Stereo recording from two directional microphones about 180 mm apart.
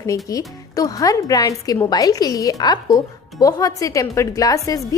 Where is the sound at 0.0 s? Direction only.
20° left (ahead or behind).